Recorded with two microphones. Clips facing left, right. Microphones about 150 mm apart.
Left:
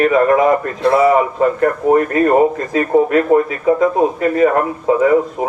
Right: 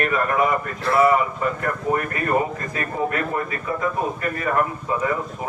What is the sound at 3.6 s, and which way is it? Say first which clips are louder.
A man's voice: left 11 dB; 90° left.